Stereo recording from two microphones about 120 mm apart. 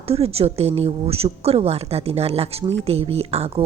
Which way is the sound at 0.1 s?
55° right (ahead or behind).